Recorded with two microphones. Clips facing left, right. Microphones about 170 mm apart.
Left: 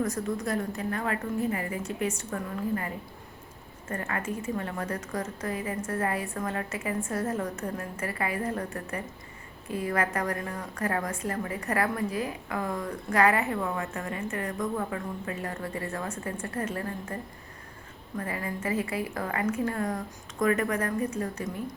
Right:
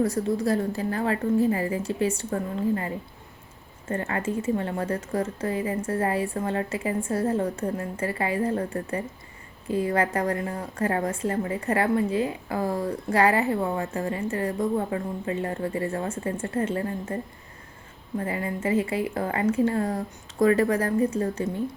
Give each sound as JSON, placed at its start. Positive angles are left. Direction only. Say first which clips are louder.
{"t": 0.0, "sound": "a woman's voice", "louder": "right 6 dB", "side_deg": -30}
{"t": 18.2, "sound": "a woman's voice", "louder": "right 4 dB", "side_deg": -25}